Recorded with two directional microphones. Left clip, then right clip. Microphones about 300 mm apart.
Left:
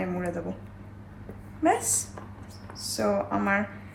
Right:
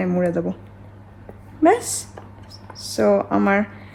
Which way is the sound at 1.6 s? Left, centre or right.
Right.